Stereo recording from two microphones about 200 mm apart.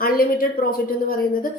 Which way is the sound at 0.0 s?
45° left (ahead or behind).